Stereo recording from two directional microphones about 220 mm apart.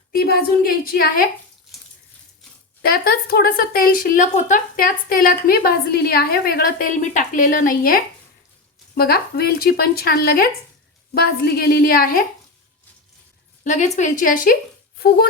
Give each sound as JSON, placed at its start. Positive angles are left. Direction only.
{"t": 0.1, "sound": "a woman's voice", "side_deg": 40}
{"t": 2.8, "sound": "a woman's voice", "side_deg": 45}
{"t": 13.7, "sound": "a woman's voice", "side_deg": 30}